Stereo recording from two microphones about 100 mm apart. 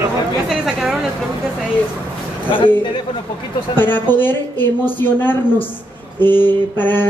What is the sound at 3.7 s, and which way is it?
A woman's voice, 20° left (ahead or behind).